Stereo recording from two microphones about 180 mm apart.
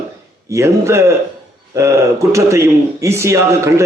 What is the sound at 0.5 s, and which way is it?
A man's voice, 15° right (ahead or behind).